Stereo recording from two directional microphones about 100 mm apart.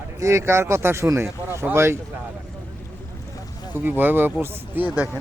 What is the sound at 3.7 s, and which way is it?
Speech, 20° right (ahead or behind).